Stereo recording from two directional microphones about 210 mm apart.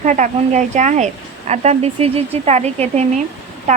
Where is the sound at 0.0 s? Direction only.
35° right (ahead or behind).